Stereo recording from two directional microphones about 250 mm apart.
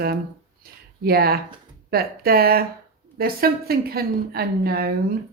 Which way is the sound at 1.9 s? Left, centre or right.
Right.